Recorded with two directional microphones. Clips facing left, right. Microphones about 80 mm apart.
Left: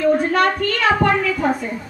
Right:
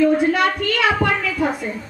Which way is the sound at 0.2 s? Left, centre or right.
Left.